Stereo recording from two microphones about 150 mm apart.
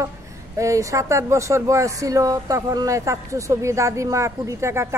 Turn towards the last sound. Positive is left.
turn(degrees=-20)  # may be behind; listen again after turning